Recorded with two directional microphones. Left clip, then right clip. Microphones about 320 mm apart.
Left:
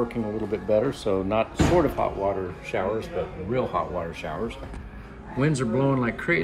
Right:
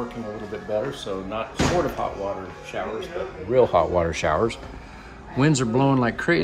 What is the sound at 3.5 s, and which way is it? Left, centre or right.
Speech, right.